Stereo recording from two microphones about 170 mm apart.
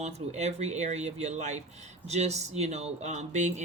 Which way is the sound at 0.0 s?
40° right (ahead or behind).